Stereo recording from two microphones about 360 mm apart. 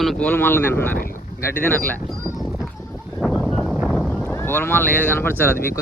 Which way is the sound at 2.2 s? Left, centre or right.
Centre.